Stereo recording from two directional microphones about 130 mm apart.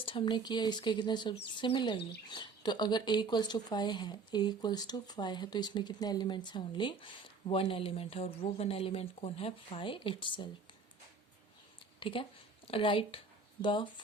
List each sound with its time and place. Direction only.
0.0 s speech: 40° left (ahead or behind)
11.9 s speech: 45° left (ahead or behind)